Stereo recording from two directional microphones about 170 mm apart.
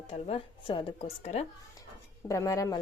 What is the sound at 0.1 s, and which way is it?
Speech, 35° left (ahead or behind).